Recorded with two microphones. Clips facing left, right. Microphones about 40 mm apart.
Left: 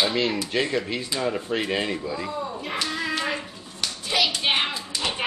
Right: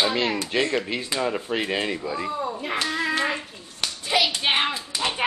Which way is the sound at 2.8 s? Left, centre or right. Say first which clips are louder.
Right 2 dB; centre.